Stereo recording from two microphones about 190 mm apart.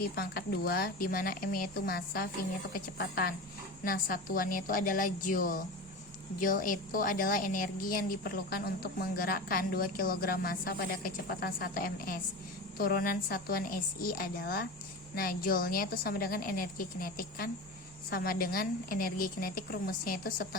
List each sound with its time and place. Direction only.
0.2 s a woman's voice: 55° left (ahead or behind)